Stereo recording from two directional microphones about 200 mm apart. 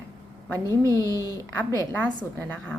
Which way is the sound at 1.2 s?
15° left (ahead or behind).